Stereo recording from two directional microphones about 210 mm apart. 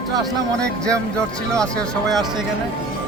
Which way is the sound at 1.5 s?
5° left (ahead or behind).